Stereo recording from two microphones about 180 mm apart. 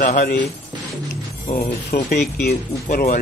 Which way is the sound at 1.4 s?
60° left (ahead or behind).